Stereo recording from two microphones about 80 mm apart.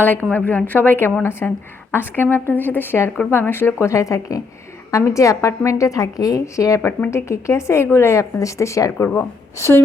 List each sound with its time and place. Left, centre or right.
0.0 s a woman's voice: left